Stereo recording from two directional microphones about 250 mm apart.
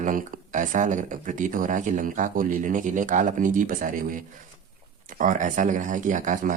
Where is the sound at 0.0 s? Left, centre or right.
Right.